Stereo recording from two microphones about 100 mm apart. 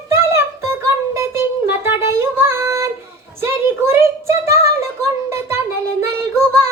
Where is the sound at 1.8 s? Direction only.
25° right (ahead or behind).